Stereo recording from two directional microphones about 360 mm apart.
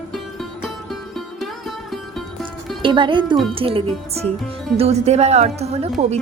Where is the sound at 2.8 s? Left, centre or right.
Centre.